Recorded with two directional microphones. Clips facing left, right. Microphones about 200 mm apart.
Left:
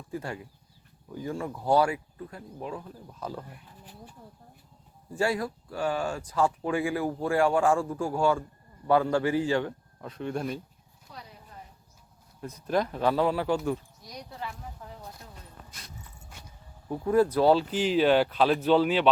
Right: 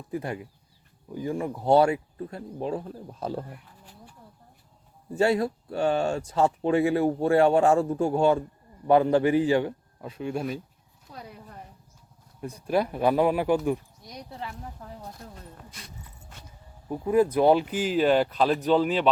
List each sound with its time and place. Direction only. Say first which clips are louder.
0.1 s a man's voice: right 4 dB; 15° right (ahead or behind)
5.1 s a man's voice: right 5 dB; 25° right (ahead or behind); by 10.6 s 5° right (ahead or behind)
11.1 s clip-clop: right 4 dB; 55° right (ahead or behind)
12.6 s a man's voice: right 2 dB; 10° right (ahead or behind)
16.9 s a man's voice: right 1 dB; 10° right (ahead or behind)
18.0 s speech: right 1 dB; centre (ahead or behind)